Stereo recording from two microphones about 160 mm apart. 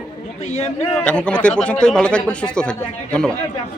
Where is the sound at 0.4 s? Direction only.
45° left (ahead or behind).